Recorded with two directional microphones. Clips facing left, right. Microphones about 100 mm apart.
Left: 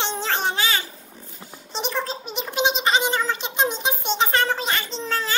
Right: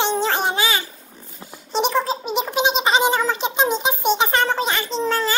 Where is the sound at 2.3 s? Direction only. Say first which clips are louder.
Right 3 dB; 20° right (ahead or behind).